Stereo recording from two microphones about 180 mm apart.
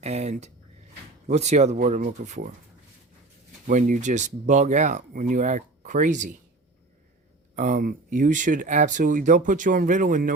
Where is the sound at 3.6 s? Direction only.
45° right (ahead or behind).